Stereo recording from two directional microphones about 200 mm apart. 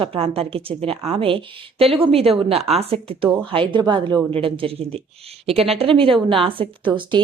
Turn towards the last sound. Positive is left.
turn(degrees=-25)  # may be behind; listen again after turning